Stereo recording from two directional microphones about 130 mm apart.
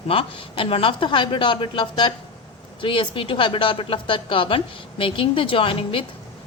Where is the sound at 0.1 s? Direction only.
45° left (ahead or behind).